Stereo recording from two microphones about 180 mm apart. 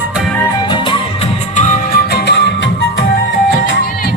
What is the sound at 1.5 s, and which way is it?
Music, 45° left (ahead or behind).